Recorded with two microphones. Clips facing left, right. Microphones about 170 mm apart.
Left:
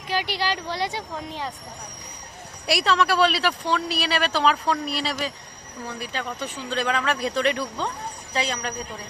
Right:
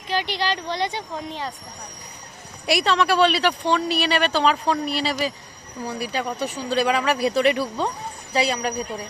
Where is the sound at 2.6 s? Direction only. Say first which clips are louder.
Right 2 dB; centre (ahead or behind).